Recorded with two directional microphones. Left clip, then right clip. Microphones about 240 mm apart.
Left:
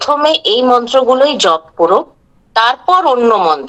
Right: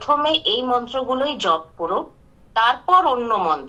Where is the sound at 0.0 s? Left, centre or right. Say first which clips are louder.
Left 7 dB; left.